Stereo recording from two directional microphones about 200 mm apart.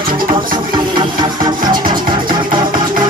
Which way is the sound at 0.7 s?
25° right (ahead or behind).